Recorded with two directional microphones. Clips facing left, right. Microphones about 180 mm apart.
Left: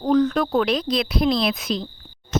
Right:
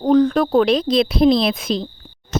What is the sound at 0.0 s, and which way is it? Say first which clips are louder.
Speech: right 4 dB; 30° right (ahead or behind).